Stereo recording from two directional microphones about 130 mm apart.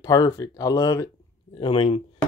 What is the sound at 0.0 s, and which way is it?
Speech, 25° left (ahead or behind).